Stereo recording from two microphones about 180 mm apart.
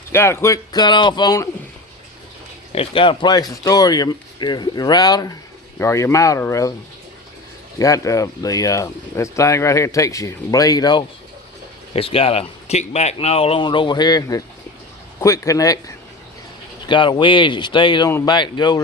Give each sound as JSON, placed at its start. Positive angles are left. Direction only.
{"t": 0.1, "sound": "speech", "side_deg": 15}
{"t": 2.7, "sound": "speech", "side_deg": 30}
{"t": 7.8, "sound": "speech", "side_deg": 20}
{"t": 16.8, "sound": "speech", "side_deg": 25}